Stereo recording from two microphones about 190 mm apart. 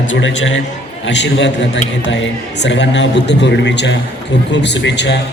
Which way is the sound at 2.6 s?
70° left (ahead or behind).